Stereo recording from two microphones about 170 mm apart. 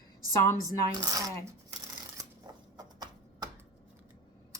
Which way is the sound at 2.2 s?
20° right (ahead or behind).